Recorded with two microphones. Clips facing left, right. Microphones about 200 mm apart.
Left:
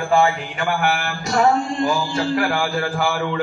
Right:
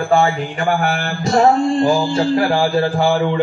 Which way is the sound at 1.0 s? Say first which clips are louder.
Right 5 dB; 35° right (ahead or behind).